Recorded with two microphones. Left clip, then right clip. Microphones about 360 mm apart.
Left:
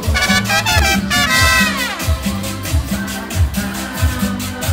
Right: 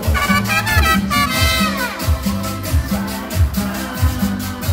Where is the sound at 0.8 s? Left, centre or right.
Left.